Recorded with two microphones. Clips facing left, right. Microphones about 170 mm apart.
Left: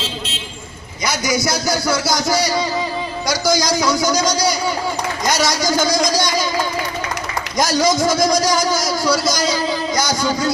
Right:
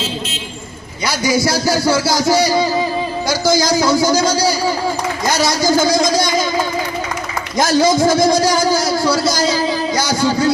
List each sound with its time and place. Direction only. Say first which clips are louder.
1.0 s a man's voice: right 3 dB; 30° right (ahead or behind)
7.6 s a man's voice: right 4 dB; 25° right (ahead or behind)